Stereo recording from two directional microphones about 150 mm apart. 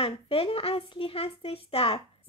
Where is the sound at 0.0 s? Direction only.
40° left (ahead or behind).